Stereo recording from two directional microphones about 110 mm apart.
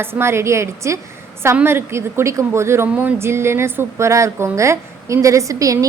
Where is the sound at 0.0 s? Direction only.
20° right (ahead or behind).